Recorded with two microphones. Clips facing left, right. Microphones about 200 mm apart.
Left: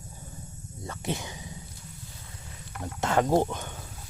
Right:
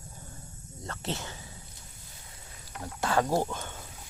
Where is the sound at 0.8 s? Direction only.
10° left (ahead or behind).